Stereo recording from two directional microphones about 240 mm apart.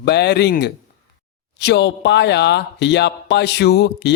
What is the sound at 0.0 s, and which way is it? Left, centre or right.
Speech, left.